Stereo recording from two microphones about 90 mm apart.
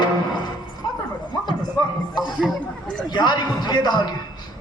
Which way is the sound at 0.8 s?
65° left (ahead or behind).